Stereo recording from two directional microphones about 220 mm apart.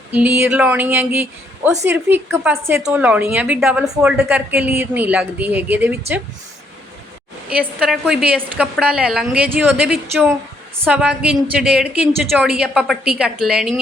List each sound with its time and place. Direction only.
0.1 s a woman's voice: 10° right (ahead or behind)
7.5 s a woman's voice: centre (ahead or behind)